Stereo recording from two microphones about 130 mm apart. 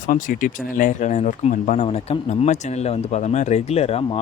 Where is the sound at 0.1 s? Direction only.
90° left.